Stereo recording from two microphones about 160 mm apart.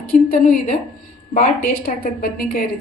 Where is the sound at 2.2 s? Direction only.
65° left (ahead or behind).